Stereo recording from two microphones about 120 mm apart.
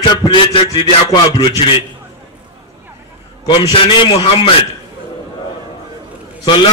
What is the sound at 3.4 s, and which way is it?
A man's voice, 40° left (ahead or behind).